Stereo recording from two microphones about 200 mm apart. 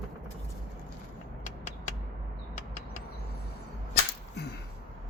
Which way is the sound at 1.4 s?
35° left (ahead or behind).